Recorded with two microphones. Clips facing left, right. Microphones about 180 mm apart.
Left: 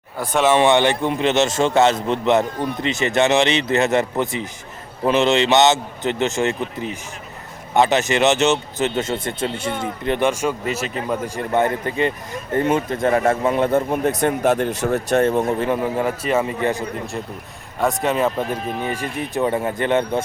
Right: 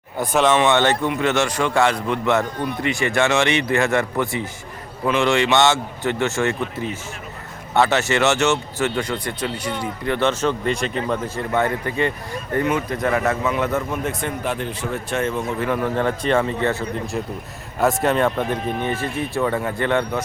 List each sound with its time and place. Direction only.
0.7 s a man's voice: 15° left (ahead or behind)
7.7 s a man's voice: 15° left (ahead or behind)
10.1 s speech: 15° left (ahead or behind)
11.3 s a man's voice: 20° left (ahead or behind); by 15.5 s 40° left (ahead or behind)
15.5 s speech: 25° left (ahead or behind)
17.7 s speech: centre (ahead or behind); by 20.2 s 20° left (ahead or behind)